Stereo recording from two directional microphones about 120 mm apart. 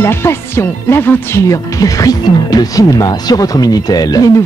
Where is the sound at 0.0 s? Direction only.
20° left (ahead or behind).